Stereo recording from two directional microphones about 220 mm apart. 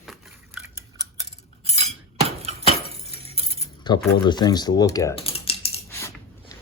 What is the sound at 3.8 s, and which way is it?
Speech, 20° left (ahead or behind).